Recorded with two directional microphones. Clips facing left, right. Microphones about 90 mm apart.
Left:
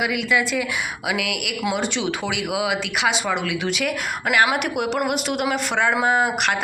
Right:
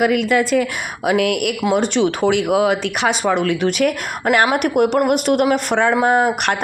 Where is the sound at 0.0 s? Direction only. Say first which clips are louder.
Right 6 dB; 45° right (ahead or behind).